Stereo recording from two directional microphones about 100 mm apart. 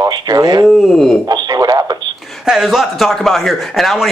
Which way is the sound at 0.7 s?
Centre (ahead or behind).